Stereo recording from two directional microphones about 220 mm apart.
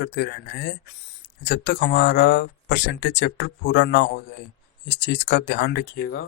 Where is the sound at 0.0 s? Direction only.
50° left (ahead or behind).